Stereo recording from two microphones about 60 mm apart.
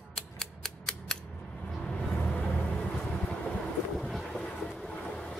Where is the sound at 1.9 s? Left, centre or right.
Centre.